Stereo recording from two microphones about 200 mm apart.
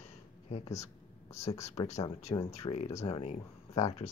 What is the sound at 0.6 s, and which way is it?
Speech, 15° left (ahead or behind).